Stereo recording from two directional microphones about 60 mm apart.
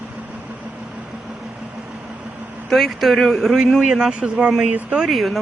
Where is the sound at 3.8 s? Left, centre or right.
Centre.